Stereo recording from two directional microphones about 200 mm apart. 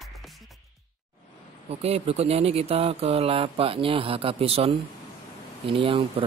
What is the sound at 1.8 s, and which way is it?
Speech, 30° right (ahead or behind).